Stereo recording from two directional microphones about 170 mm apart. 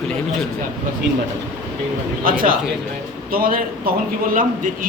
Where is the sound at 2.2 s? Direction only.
55° right (ahead or behind).